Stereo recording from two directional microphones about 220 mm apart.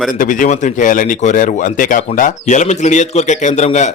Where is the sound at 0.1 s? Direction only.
35° left (ahead or behind).